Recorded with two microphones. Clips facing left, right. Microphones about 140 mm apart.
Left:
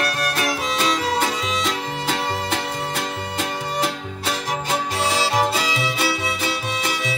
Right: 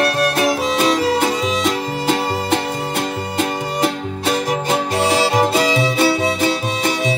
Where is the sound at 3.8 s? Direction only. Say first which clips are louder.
Right 7 dB; 55° right (ahead or behind).